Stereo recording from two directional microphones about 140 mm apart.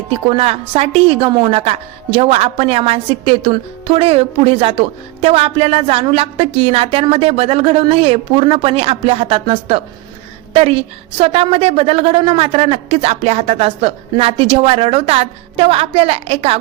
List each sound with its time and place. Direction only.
0.3 s a woman's voice: 45° right (ahead or behind)